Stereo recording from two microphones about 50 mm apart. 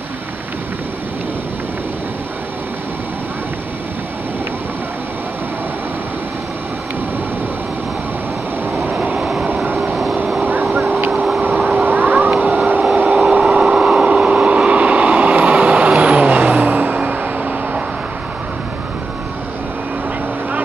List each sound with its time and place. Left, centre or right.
9.1 s vehicle: centre
10.4 s vehicle: right
11.5 s vehicle: right
11.9 s a sound: right
12.4 s cat: right
13.0 s vehicle: right